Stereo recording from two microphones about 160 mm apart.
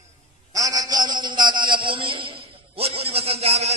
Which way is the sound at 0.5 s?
20° right (ahead or behind).